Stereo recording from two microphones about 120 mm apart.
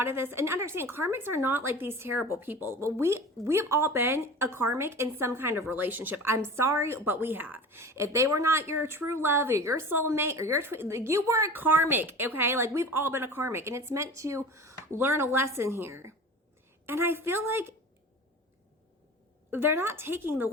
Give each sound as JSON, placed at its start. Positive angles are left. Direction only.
{"t": 0.0, "sound": "speech", "side_deg": -20}
{"t": 19.5, "sound": "speech", "side_deg": -20}